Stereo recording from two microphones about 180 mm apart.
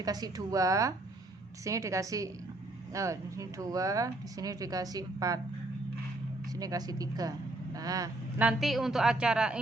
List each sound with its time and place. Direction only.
0.0 s a woman's voice: 20° right (ahead or behind)
6.6 s speech: 20° right (ahead or behind)
8.4 s a woman's voice: 5° right (ahead or behind)